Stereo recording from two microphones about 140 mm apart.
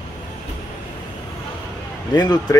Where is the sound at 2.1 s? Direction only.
25° left (ahead or behind).